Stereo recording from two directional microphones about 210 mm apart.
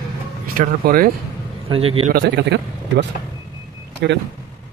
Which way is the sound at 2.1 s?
55° right (ahead or behind).